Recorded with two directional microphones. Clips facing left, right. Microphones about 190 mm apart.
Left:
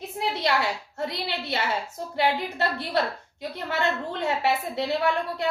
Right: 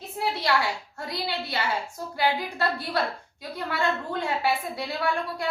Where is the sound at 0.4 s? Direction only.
25° left (ahead or behind).